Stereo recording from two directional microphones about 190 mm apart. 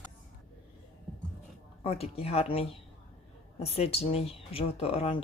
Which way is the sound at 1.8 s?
30° left (ahead or behind).